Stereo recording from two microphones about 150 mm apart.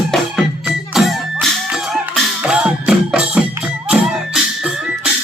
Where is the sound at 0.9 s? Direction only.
Centre (ahead or behind).